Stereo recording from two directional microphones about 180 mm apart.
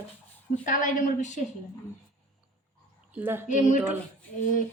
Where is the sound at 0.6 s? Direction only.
50° left (ahead or behind).